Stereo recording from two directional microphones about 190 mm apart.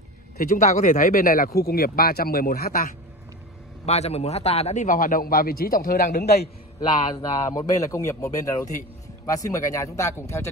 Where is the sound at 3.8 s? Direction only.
35° left (ahead or behind); by 6.5 s 55° left (ahead or behind).